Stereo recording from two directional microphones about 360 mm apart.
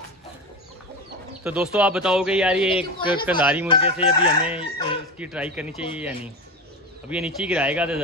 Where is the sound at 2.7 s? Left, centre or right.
Centre.